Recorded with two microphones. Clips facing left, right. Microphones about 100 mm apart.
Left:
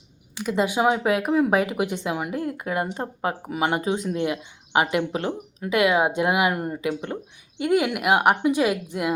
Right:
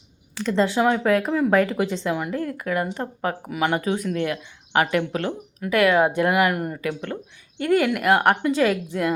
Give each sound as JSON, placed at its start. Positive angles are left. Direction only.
{"t": 0.3, "sound": "a woman's voice", "side_deg": 15}